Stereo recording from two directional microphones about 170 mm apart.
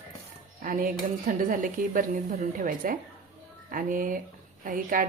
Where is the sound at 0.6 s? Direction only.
55° right (ahead or behind).